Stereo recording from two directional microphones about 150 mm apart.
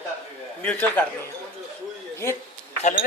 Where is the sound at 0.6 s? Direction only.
10° left (ahead or behind).